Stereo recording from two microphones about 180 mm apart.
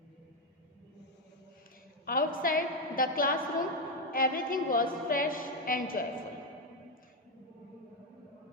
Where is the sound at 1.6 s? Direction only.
50° left (ahead or behind).